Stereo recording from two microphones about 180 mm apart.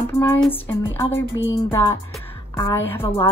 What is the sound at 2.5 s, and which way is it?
Speech, 20° left (ahead or behind).